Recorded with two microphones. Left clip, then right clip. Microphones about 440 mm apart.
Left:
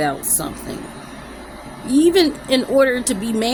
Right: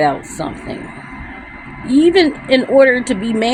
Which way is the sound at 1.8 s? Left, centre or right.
Left.